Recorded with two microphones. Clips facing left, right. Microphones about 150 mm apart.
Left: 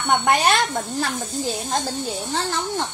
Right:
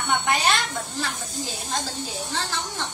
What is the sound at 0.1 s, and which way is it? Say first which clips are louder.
Speech: left 5 dB; 55° left (ahead or behind).